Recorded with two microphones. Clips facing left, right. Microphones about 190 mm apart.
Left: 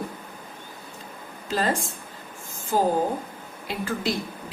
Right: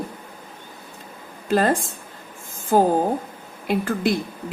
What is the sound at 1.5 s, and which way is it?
Speech, 55° right (ahead or behind).